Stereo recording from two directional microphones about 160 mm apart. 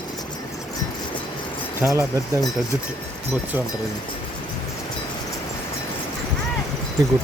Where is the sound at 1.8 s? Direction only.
10° right (ahead or behind).